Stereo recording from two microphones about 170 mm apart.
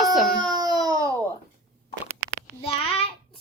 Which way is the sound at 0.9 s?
20° right (ahead or behind).